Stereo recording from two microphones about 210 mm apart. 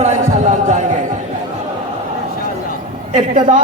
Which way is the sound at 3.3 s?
40° right (ahead or behind).